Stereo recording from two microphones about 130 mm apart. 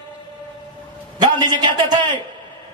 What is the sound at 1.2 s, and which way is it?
Speech, 35° right (ahead or behind).